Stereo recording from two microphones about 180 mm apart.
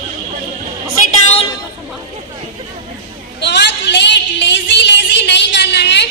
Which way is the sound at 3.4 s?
70° left (ahead or behind).